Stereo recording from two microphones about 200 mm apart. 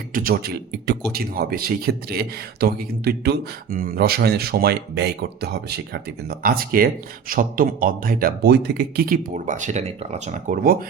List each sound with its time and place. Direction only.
0.1 s speech: 50° right (ahead or behind)